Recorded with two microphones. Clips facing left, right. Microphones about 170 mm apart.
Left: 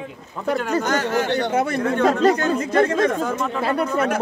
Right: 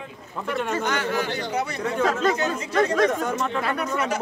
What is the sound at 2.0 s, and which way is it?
Speech, 35° left (ahead or behind).